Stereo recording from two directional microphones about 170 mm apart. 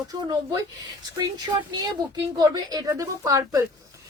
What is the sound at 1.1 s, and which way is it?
A woman's voice, 25° right (ahead or behind).